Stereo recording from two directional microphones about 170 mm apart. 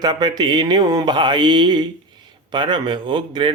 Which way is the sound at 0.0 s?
25° right (ahead or behind).